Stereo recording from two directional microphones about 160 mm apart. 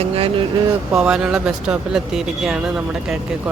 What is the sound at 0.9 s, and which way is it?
Speech, 5° right (ahead or behind).